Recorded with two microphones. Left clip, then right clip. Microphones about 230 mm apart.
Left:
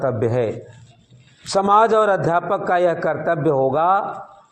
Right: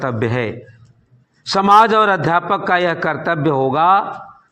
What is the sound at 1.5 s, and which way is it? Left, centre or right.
Speech, right.